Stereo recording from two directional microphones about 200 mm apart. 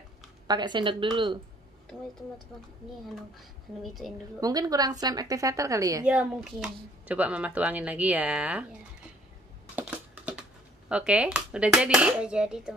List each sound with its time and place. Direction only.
0.5 s speech: 20° right (ahead or behind)
3.3 s speech: centre (ahead or behind)
4.4 s speech: 20° right (ahead or behind)
6.0 s speech: 5° right (ahead or behind)
9.8 s typing: 5° right (ahead or behind)
10.9 s speech: 5° right (ahead or behind)